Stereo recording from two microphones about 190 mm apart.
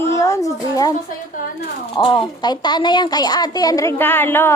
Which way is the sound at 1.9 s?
25° left (ahead or behind).